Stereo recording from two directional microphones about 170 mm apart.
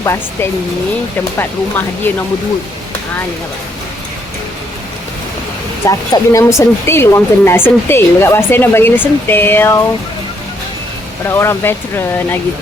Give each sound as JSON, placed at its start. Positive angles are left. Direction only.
{"t": 0.0, "sound": "speech", "side_deg": 15}
{"t": 5.9, "sound": "speech", "side_deg": 20}
{"t": 11.3, "sound": "speech", "side_deg": 15}